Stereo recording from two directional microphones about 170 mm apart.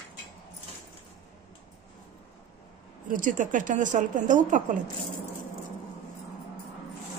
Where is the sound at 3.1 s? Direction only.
50° right (ahead or behind).